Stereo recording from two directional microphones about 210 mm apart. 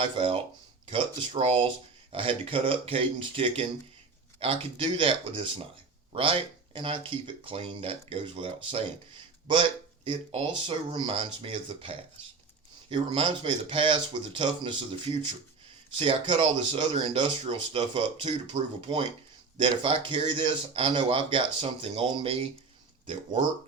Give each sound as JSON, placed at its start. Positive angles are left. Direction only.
{"t": 0.0, "sound": "speech", "side_deg": -25}